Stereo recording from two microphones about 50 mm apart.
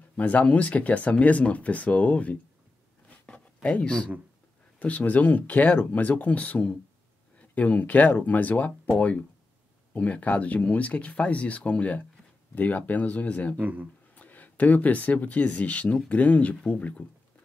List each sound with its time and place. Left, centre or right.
0.2 s speech: left
3.6 s speech: left
13.6 s speech: right
14.1 s speech: left